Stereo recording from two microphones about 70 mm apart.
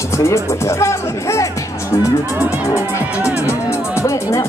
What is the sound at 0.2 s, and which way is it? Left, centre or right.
Speech, left.